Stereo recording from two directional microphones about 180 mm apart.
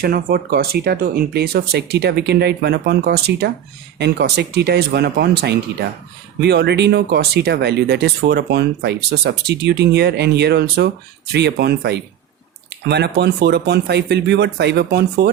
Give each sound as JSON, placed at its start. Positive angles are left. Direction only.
{"t": 0.0, "sound": "speech", "side_deg": -55}